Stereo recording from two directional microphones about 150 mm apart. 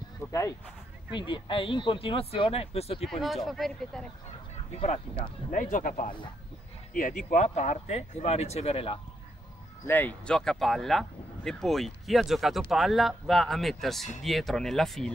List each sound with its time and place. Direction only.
0.3 s speech: 20° left (ahead or behind)
1.1 s speech: 30° left (ahead or behind)
3.1 s speech: centre (ahead or behind)
4.7 s speech: 45° left (ahead or behind)
5.5 s speech: 60° left (ahead or behind); by 9.0 s 40° left (ahead or behind)
9.8 s speech: 10° left (ahead or behind)